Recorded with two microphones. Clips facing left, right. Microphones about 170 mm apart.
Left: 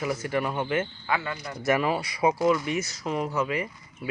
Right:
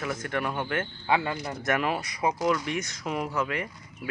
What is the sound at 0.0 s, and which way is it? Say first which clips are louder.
Speech: left 3 dB; 10° left (ahead or behind).